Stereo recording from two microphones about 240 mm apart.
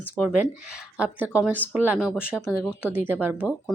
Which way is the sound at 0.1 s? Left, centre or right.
Centre.